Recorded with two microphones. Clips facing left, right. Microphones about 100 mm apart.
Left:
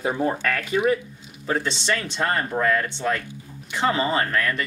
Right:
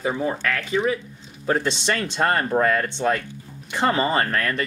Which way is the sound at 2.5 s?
30° right (ahead or behind).